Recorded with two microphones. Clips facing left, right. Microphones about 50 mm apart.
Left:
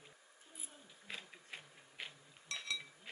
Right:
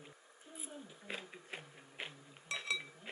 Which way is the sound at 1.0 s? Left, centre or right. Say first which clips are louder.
Right 2 dB; centre.